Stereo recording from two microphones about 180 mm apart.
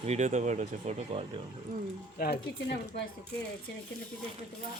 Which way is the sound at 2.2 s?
60° left (ahead or behind).